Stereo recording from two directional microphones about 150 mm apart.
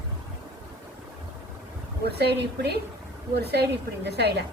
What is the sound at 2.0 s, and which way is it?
A woman's voice, 90° right.